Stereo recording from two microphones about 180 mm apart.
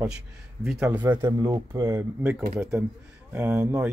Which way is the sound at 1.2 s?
20° right (ahead or behind).